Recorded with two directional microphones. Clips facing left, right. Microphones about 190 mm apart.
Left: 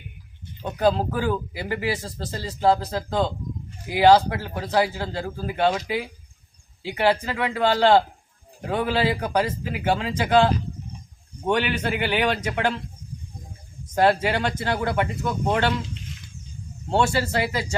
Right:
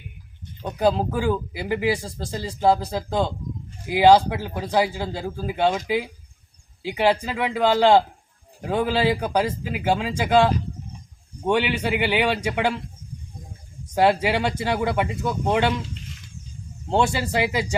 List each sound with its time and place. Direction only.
0.8 s speech: 10° right (ahead or behind)
11.4 s speech: 10° right (ahead or behind)
13.9 s speech: 10° right (ahead or behind)
16.9 s speech: 15° right (ahead or behind)